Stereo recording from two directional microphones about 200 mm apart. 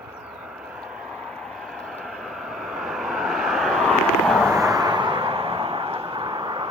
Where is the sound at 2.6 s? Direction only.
Centre (ahead or behind).